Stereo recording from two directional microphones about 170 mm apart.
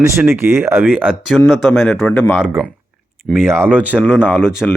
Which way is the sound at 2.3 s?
10° right (ahead or behind).